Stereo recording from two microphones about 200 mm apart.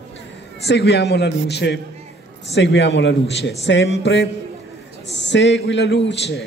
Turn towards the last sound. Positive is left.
turn(degrees=60)  # may be behind; listen again after turning